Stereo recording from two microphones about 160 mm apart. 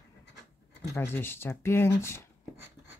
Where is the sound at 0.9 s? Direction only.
15° left (ahead or behind).